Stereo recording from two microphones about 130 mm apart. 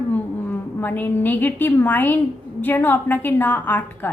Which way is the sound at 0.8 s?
15° left (ahead or behind).